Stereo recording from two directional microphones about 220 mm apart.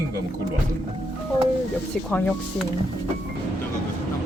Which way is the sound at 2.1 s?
5° left (ahead or behind).